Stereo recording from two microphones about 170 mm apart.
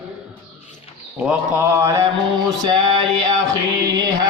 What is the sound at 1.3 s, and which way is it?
Speech, 10° right (ahead or behind).